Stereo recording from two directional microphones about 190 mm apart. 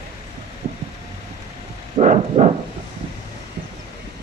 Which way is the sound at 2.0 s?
40° right (ahead or behind).